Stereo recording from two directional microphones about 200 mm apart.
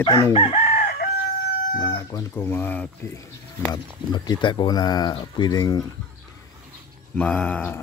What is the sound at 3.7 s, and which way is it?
Speech, 20° left (ahead or behind).